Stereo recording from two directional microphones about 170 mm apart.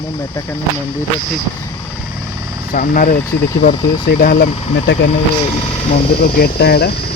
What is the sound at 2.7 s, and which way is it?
Speech, 55° left (ahead or behind).